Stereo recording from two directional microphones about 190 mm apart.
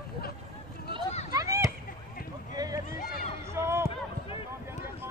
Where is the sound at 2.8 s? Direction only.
50° left (ahead or behind).